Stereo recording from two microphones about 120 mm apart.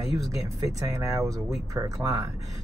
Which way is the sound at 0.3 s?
30° right (ahead or behind).